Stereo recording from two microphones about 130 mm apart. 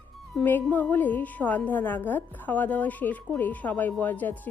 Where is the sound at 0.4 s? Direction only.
15° left (ahead or behind).